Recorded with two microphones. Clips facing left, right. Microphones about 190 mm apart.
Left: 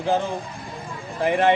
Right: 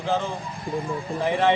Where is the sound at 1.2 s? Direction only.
15° left (ahead or behind).